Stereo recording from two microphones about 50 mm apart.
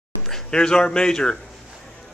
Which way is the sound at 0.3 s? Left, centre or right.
Centre.